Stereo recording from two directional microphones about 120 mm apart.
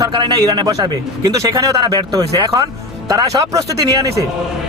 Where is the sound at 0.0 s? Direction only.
35° right (ahead or behind).